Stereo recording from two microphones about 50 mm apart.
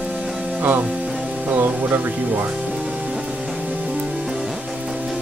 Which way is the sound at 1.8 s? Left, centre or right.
Right.